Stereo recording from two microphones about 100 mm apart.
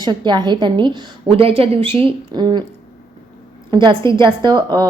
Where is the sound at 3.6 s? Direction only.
55° right (ahead or behind).